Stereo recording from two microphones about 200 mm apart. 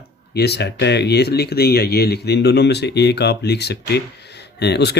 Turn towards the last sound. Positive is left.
turn(degrees=55)  # may be behind; listen again after turning